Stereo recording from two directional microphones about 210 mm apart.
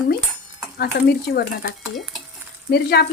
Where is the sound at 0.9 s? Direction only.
50° left (ahead or behind).